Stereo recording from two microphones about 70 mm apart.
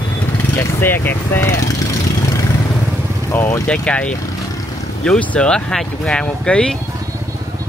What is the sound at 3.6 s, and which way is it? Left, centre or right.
Speech, centre.